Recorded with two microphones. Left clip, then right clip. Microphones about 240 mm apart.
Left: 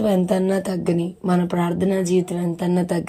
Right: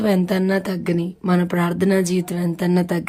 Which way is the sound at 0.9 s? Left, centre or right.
Centre.